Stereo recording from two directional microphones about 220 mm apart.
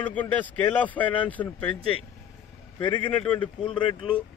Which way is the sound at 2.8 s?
20° left (ahead or behind).